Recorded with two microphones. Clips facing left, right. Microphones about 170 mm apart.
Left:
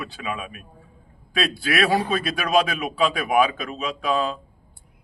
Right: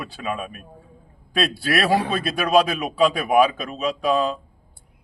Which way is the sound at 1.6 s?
35° right (ahead or behind).